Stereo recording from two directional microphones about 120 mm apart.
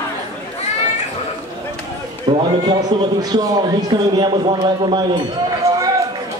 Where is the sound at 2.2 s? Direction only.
40° right (ahead or behind).